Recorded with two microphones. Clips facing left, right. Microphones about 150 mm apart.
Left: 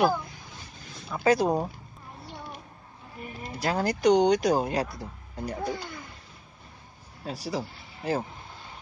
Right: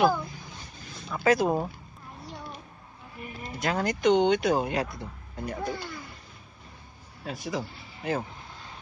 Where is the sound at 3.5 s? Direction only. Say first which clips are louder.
Left 1 dB; 35° left (ahead or behind).